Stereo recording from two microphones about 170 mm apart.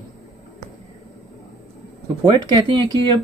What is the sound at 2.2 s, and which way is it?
Speech, 25° right (ahead or behind).